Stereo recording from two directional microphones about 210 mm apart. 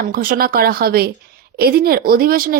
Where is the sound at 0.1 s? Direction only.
45° right (ahead or behind).